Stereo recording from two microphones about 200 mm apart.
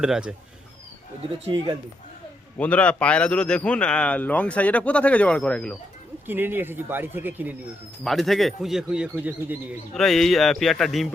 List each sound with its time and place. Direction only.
0.0 s a man's voice: 5° right (ahead or behind)
1.5 s speech: 25° right (ahead or behind)
2.6 s a man's voice: 5° left (ahead or behind)
6.2 s speech: 10° right (ahead or behind)
8.0 s a man's voice: centre (ahead or behind)